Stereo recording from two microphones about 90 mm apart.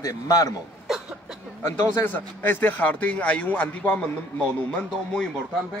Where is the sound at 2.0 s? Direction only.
25° left (ahead or behind).